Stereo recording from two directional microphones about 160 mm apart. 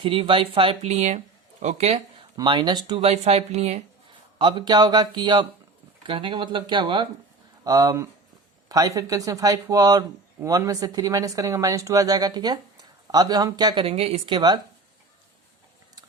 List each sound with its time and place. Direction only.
0.0 s speech: 35° right (ahead or behind)
2.3 s speech: 30° right (ahead or behind)
3.1 s speech: 40° right (ahead or behind)
4.4 s speech: 30° right (ahead or behind)
13.8 s speech: 40° right (ahead or behind)